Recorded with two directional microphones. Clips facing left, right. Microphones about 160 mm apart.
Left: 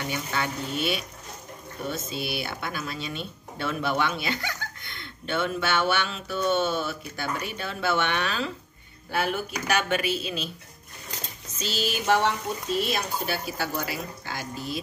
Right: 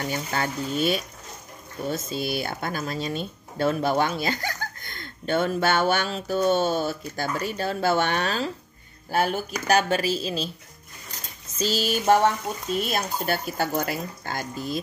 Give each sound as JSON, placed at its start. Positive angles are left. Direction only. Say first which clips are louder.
{"t": 0.0, "sound": "speech", "louder": "right 2 dB", "side_deg": -40}
{"t": 2.0, "sound": "speech", "louder": "right 4 dB", "side_deg": -40}
{"t": 11.5, "sound": "speech", "louder": "right 5 dB", "side_deg": -40}